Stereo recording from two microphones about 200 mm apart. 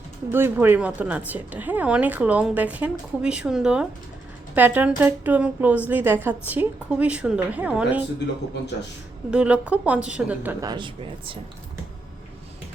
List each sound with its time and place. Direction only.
0.3 s a woman's voice: 10° right (ahead or behind)
9.3 s a woman's voice: 5° right (ahead or behind)
10.7 s speech: 25° right (ahead or behind)